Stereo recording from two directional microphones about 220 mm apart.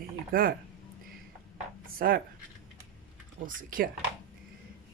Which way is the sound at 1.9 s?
40° right (ahead or behind).